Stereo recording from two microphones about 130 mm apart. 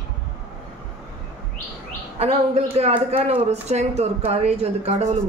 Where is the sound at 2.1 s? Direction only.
50° right (ahead or behind).